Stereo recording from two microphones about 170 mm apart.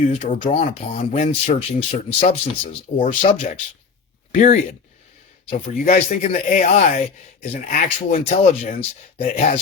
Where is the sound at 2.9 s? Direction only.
50° left (ahead or behind).